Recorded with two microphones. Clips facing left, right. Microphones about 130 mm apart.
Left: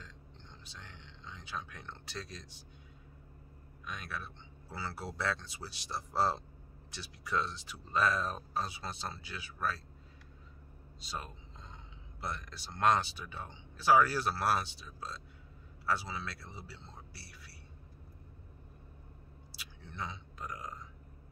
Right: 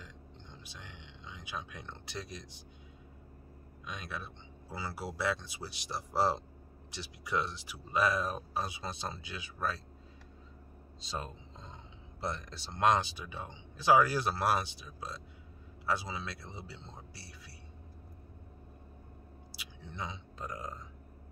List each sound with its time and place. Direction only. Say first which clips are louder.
0.7 s speech: right 2 dB; 15° right (ahead or behind)
3.8 s speech: even; 20° right (ahead or behind)
11.1 s speech: right 3 dB; 25° right (ahead or behind)
19.5 s speech: right 1 dB; 15° right (ahead or behind)